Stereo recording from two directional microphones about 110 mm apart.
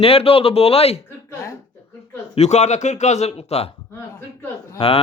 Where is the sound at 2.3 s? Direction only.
90° left; by 3.7 s 70° left (ahead or behind).